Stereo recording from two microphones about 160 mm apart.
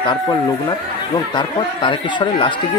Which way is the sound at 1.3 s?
30° left (ahead or behind).